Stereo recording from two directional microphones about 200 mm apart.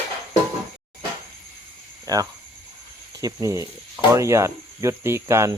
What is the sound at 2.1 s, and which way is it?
Speech, 15° right (ahead or behind).